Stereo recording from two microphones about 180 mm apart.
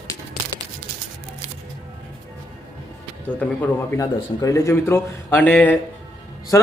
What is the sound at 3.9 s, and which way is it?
Speech, 20° left (ahead or behind).